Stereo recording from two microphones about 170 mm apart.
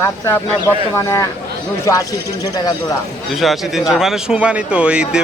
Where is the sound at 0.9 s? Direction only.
15° left (ahead or behind).